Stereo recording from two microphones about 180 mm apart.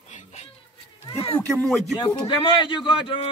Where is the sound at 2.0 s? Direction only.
30° left (ahead or behind).